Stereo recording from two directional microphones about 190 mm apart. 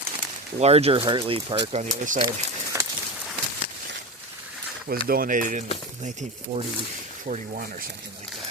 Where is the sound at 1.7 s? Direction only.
35° right (ahead or behind).